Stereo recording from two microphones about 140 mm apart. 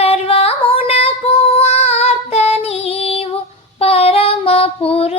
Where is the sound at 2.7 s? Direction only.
45° left (ahead or behind).